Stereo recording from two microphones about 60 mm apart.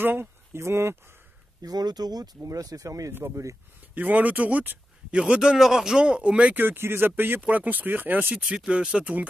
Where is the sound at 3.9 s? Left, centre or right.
Right.